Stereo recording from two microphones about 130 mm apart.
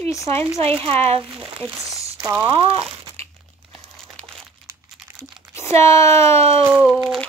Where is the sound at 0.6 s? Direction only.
45° right (ahead or behind).